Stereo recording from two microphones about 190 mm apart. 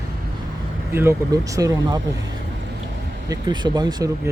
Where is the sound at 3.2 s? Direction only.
20° right (ahead or behind).